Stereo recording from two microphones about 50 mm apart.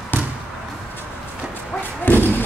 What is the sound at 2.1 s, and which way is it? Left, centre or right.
Speech, left.